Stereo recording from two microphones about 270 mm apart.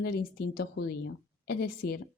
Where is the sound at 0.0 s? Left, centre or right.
Left.